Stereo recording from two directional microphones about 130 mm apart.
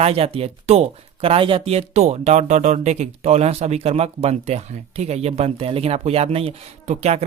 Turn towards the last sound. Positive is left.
turn(degrees=-55)  # may be behind; listen again after turning